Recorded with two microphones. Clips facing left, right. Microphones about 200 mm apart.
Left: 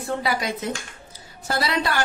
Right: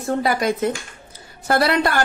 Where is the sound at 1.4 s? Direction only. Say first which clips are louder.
Right 6 dB; 60° right (ahead or behind).